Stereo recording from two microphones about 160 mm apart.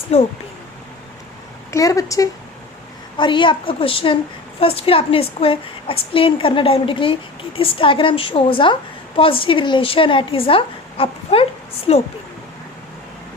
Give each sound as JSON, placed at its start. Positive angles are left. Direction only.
{"t": 0.1, "sound": "a woman's voice", "side_deg": 40}
{"t": 1.7, "sound": "a woman's voice", "side_deg": 20}